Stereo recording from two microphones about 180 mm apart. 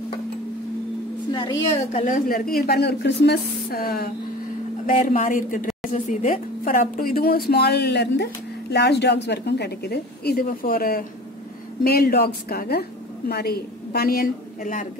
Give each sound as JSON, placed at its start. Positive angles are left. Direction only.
{"t": 1.3, "sound": "speech", "side_deg": 25}
{"t": 1.9, "sound": "a woman's voice", "side_deg": 45}